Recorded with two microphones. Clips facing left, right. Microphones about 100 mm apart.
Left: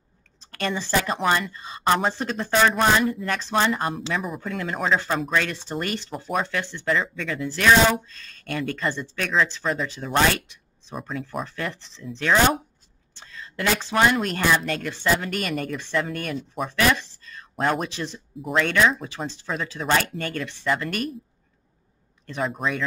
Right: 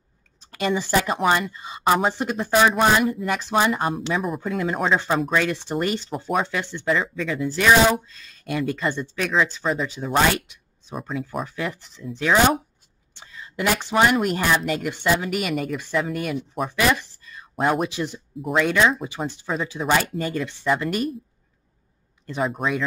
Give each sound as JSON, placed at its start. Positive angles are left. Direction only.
{"t": 0.4, "sound": "speech", "side_deg": -10}
{"t": 6.1, "sound": "speech", "side_deg": -5}
{"t": 6.4, "sound": "speech", "side_deg": -15}
{"t": 6.9, "sound": "speech", "side_deg": -5}
{"t": 22.4, "sound": "speech", "side_deg": -5}